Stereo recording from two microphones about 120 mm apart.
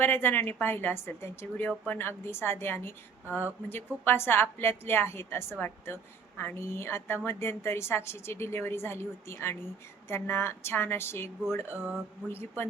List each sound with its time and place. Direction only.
0.0 s a woman's voice: 15° left (ahead or behind)
3.2 s speech: 15° right (ahead or behind)
4.0 s a woman's voice: 20° left (ahead or behind)
11.8 s speech: 5° right (ahead or behind)
12.3 s a woman's voice: 20° left (ahead or behind)